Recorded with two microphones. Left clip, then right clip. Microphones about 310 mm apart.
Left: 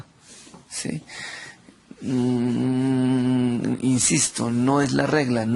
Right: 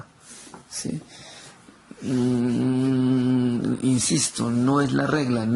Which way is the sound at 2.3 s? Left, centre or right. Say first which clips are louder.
Even; centre.